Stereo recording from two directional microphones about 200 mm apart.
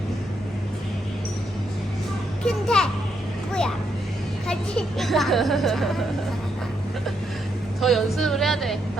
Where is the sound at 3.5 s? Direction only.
5° left (ahead or behind).